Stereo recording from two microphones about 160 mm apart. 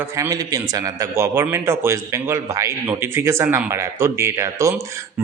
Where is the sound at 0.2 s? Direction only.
20° right (ahead or behind).